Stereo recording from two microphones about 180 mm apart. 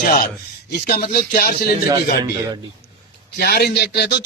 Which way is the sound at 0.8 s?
55° left (ahead or behind).